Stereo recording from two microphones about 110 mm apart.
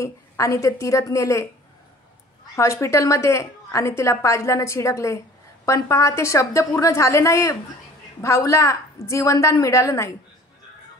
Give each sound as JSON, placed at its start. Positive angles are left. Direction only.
{"t": 0.0, "sound": "a woman's voice", "side_deg": 30}
{"t": 2.5, "sound": "a woman's voice", "side_deg": 25}